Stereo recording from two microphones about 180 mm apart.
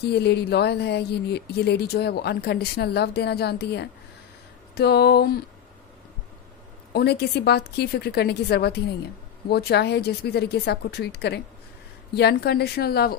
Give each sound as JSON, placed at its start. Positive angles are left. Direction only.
{"t": 0.0, "sound": "speech", "side_deg": 65}
{"t": 6.9, "sound": "speech", "side_deg": 65}